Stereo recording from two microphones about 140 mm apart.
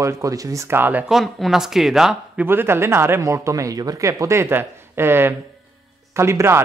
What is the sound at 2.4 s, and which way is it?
Speech, 15° right (ahead or behind).